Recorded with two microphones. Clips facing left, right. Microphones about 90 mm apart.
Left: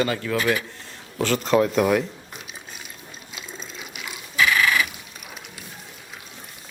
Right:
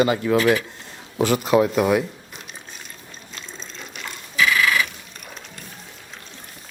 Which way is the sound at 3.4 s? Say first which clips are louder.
Left 1 dB; 5° left (ahead or behind).